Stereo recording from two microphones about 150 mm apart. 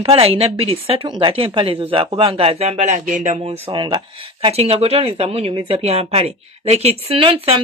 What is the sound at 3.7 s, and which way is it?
A woman's voice, 35° right (ahead or behind).